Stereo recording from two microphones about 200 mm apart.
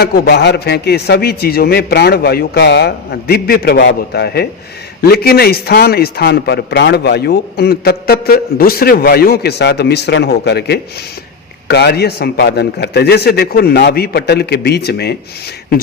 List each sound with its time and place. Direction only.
0.0 s a man's voice: 50° left (ahead or behind)